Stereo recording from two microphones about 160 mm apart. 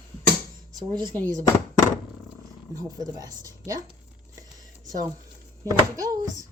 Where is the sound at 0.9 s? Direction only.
25° right (ahead or behind).